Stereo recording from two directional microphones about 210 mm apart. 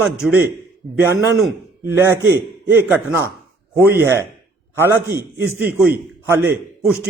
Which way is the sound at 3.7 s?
10° right (ahead or behind).